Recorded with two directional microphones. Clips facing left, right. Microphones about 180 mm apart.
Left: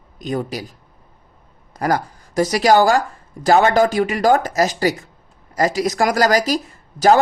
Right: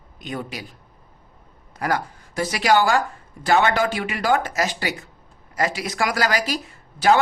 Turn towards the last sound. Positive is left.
turn(degrees=40)  # may be behind; listen again after turning